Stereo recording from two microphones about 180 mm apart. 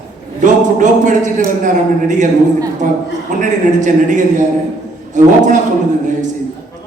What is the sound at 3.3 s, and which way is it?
Speech, 45° right (ahead or behind).